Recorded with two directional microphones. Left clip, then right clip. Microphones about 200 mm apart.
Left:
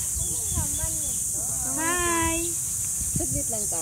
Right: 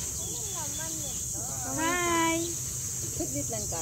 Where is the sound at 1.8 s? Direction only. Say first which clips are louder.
Left 1 dB; 25° right (ahead or behind).